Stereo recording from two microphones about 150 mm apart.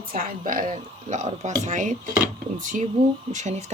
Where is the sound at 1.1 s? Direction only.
55° right (ahead or behind).